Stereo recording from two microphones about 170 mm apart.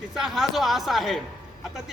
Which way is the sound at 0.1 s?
Centre (ahead or behind).